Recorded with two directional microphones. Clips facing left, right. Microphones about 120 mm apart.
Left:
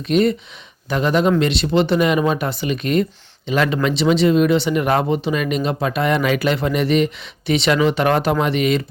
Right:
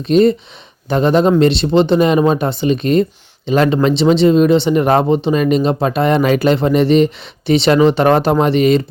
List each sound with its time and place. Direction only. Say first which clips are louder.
0.0 s speech: right 5 dB; 30° right (ahead or behind)